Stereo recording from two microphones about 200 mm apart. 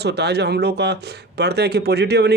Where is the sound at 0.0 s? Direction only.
55° right (ahead or behind).